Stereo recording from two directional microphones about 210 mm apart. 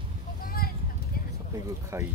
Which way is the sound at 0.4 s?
45° left (ahead or behind).